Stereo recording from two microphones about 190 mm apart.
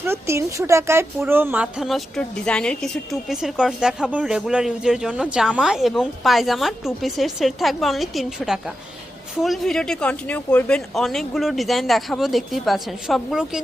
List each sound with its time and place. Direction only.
0.0 s a woman's voice: 15° right (ahead or behind)